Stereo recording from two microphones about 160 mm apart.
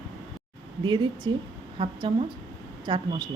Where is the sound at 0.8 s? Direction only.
25° right (ahead or behind).